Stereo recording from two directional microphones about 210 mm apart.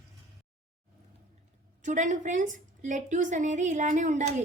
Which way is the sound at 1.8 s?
35° right (ahead or behind).